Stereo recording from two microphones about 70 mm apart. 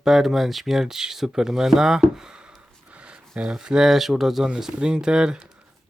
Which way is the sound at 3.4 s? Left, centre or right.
Centre.